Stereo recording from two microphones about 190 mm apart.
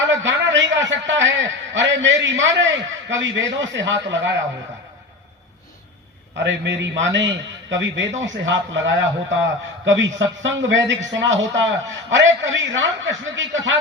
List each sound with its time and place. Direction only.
0.0 s a man's voice: 75° right (ahead or behind)
6.3 s a man's voice: 75° right (ahead or behind)